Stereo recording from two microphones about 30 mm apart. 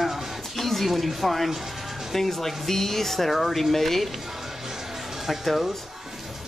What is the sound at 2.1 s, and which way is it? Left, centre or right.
Speech, centre.